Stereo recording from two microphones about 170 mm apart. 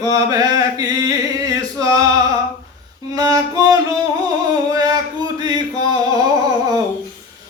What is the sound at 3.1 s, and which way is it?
Female singing, 20° right (ahead or behind).